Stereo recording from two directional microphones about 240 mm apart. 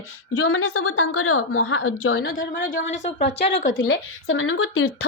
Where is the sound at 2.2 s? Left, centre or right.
Left.